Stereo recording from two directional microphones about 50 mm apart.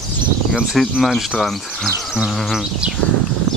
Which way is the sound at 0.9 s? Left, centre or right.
Centre.